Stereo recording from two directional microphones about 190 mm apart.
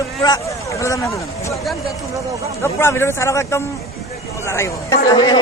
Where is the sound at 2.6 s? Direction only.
15° left (ahead or behind).